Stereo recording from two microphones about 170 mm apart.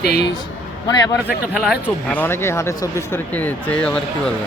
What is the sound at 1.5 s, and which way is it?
Speech, 5° right (ahead or behind).